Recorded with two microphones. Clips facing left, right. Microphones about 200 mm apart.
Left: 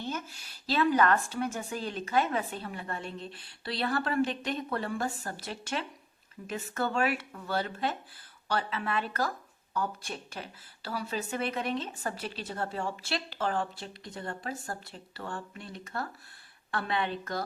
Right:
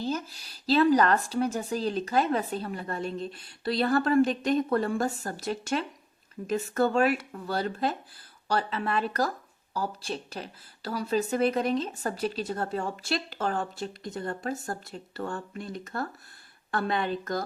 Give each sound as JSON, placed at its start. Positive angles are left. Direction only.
{"t": 0.0, "sound": "speech", "side_deg": -35}